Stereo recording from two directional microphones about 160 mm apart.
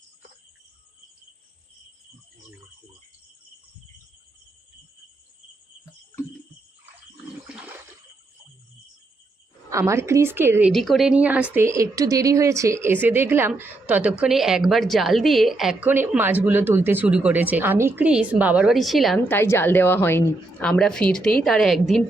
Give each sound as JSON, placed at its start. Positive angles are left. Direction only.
{"t": 7.4, "sound": "toilet flush", "side_deg": -5}
{"t": 9.6, "sound": "speech", "side_deg": -20}
{"t": 10.7, "sound": "speech", "side_deg": 0}
{"t": 19.3, "sound": "a woman's voice", "side_deg": 15}